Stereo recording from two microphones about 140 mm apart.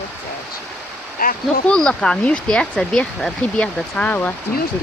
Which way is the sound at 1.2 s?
90° left.